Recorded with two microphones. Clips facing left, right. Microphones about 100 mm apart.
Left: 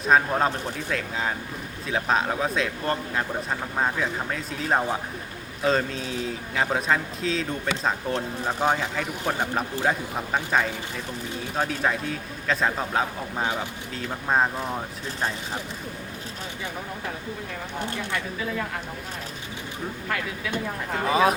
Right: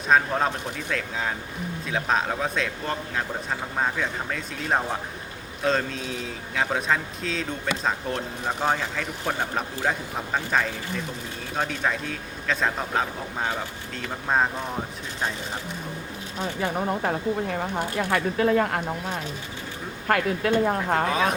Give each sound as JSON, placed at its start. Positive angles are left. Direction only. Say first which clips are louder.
{"t": 0.0, "sound": "speech", "louder": "left 1 dB", "side_deg": 0}
{"t": 16.6, "sound": "a woman's voice", "louder": "right 10 dB", "side_deg": -55}
{"t": 21.1, "sound": "speech", "louder": "left 3 dB", "side_deg": 5}